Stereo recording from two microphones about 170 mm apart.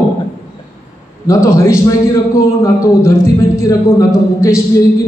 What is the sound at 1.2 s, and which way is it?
Speech, 15° left (ahead or behind).